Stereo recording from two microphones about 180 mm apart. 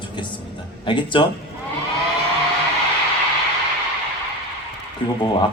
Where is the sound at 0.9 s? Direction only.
25° left (ahead or behind).